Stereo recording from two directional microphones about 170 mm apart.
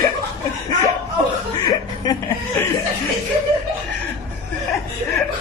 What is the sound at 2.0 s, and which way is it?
Chuckle, 25° left (ahead or behind).